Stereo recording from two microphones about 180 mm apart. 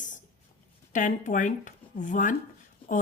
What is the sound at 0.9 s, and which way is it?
A woman's voice, 45° left (ahead or behind).